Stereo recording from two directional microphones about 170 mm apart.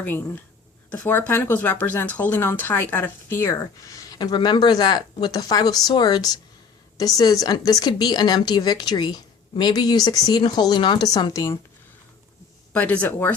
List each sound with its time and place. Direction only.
0.0 s speech: 10° left (ahead or behind)
12.7 s speech: 10° left (ahead or behind)